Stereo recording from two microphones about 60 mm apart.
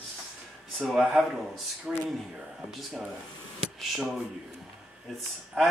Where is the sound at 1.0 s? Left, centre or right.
Centre.